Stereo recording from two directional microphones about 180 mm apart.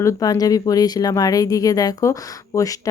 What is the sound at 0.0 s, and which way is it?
Speech, 20° left (ahead or behind).